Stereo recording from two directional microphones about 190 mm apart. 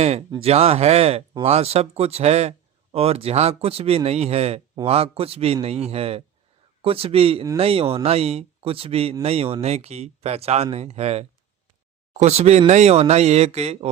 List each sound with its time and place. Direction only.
0.0 s speech: 35° right (ahead or behind)